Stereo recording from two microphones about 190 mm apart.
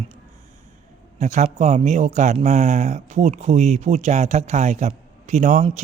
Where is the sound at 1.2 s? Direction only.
40° right (ahead or behind).